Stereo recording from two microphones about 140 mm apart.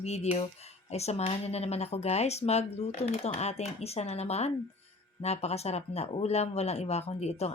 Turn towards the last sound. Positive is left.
turn(degrees=50)  # may be behind; listen again after turning